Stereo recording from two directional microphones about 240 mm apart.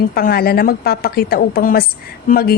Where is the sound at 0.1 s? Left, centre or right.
Left.